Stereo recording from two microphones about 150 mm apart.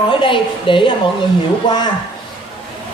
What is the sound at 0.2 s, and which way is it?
Speech, 35° left (ahead or behind).